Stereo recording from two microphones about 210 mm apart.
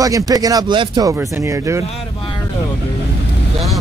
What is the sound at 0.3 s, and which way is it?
Speech, 15° right (ahead or behind).